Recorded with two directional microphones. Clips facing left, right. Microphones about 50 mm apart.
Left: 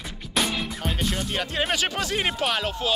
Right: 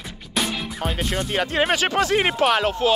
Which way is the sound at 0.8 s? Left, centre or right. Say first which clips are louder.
Right 5 dB; right.